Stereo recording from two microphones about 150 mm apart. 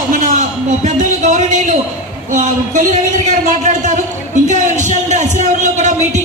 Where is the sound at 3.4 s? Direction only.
55° right (ahead or behind).